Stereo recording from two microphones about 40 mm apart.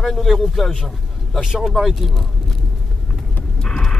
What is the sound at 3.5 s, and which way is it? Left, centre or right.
Vehicle, left.